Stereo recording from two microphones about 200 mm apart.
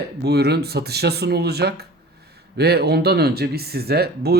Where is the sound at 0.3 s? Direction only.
55° right (ahead or behind).